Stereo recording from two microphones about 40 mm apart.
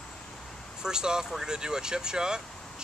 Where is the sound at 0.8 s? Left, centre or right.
Centre.